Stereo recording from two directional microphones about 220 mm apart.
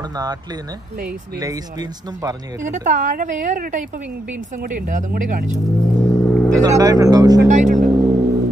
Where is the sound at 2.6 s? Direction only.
35° right (ahead or behind).